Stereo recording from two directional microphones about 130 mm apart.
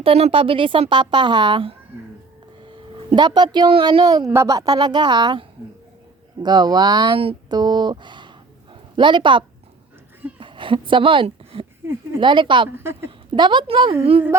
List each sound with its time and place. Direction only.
0.0 s a woman's voice: 45° right (ahead or behind)
3.2 s a woman's voice: 35° right (ahead or behind)
4.0 s a woman's voice: 30° right (ahead or behind)
8.7 s a sound: 40° right (ahead or behind)
10.4 s a woman's voice: 40° right (ahead or behind)
12.7 s a woman's voice: 20° right (ahead or behind)
13.1 s a woman's voice: 35° right (ahead or behind)